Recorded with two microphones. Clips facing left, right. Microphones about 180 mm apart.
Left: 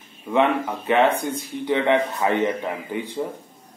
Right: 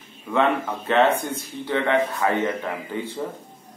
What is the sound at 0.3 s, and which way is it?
Speech, 15° left (ahead or behind).